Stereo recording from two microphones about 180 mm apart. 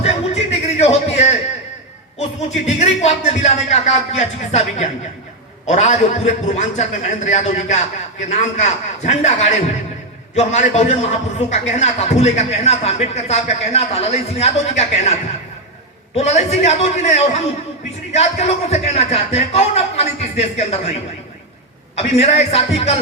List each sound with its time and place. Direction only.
0.0 s music: 35° left (ahead or behind)
2.6 s a man's voice: 40° left (ahead or behind)
21.9 s a man's voice: 35° left (ahead or behind)